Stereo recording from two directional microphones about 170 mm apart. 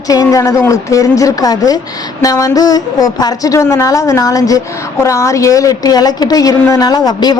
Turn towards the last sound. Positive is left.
turn(degrees=25)  # may be behind; listen again after turning